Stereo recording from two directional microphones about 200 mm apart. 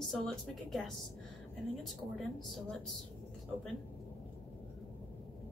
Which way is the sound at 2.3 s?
Centre (ahead or behind).